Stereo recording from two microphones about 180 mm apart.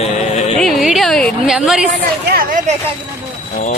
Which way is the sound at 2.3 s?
55° right (ahead or behind).